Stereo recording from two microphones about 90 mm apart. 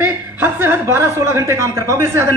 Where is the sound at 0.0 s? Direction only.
20° right (ahead or behind).